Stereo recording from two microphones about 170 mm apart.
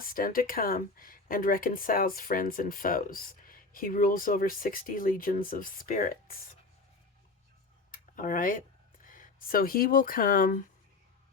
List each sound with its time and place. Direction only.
0.0 s speech: 55° left (ahead or behind)
7.9 s speech: 50° left (ahead or behind)